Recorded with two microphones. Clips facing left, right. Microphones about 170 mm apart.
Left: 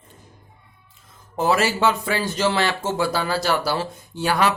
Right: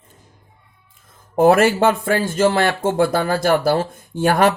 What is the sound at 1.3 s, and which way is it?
Speech, 55° right (ahead or behind).